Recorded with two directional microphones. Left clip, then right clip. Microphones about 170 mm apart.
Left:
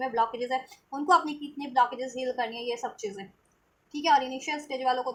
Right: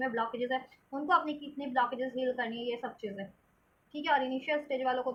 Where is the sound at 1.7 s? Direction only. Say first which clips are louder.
Left 6 dB; 30° left (ahead or behind).